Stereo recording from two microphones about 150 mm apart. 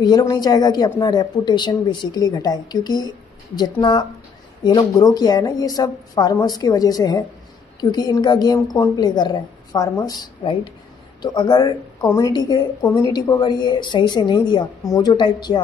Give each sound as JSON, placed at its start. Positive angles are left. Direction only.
{"t": 0.0, "sound": "speech", "side_deg": 25}